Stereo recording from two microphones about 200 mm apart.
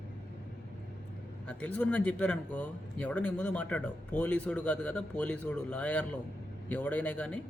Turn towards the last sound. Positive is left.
turn(degrees=5)  # may be behind; listen again after turning